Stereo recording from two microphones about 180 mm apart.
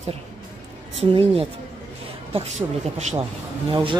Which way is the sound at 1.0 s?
35° right (ahead or behind).